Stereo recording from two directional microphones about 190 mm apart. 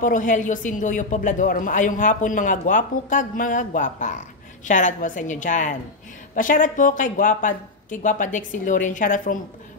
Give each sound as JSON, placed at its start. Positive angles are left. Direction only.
{"t": 0.0, "sound": "a woman's voice", "side_deg": 45}